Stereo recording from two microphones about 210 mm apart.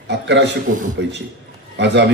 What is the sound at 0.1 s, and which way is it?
A man's voice, 55° right (ahead or behind).